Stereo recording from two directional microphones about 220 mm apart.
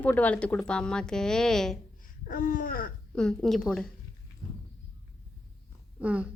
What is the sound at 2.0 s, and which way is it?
Babbling, 40° left (ahead or behind).